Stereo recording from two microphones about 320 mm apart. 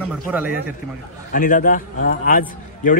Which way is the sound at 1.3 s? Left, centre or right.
Left.